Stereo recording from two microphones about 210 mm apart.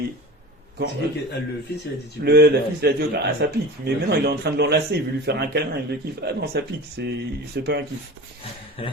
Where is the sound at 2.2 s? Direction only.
50° right (ahead or behind).